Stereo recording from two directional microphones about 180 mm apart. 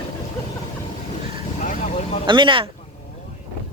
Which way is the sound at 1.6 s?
40° left (ahead or behind).